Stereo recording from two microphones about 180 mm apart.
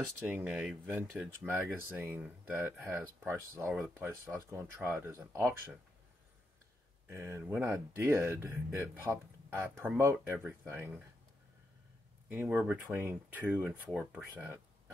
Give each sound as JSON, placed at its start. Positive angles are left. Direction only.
{"t": 0.3, "sound": "speech", "side_deg": -10}
{"t": 7.1, "sound": "speech", "side_deg": -15}
{"t": 12.3, "sound": "speech", "side_deg": -10}